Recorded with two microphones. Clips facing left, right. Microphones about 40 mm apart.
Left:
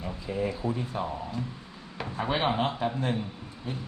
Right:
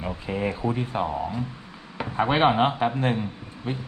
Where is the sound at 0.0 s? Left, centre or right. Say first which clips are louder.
Right 3 dB; right.